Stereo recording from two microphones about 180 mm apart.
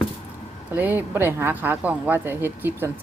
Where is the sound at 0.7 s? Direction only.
10° right (ahead or behind).